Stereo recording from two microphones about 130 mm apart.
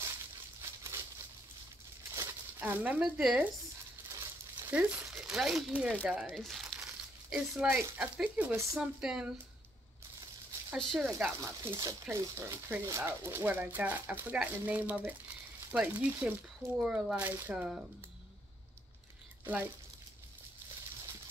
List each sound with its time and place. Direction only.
0.6 s a sound: 20° right (ahead or behind)
2.1 s a sound: 15° right (ahead or behind)
4.1 s crumpling: 20° right (ahead or behind)
4.7 s speech: 5° right (ahead or behind)
10.8 s speech: 5° left (ahead or behind)
11.1 s speech: 15° right (ahead or behind)
19.4 s speech: 15° right (ahead or behind)